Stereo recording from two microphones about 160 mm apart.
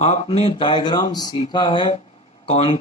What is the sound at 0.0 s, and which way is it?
Speech, 45° left (ahead or behind).